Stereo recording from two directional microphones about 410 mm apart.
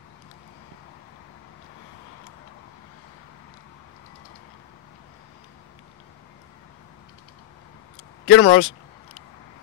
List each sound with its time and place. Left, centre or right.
8.3 s speech: left